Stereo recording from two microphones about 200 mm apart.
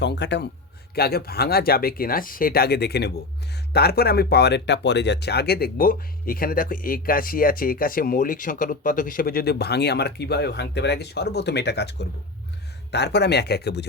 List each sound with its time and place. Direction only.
0.0 s speech: 60° left (ahead or behind)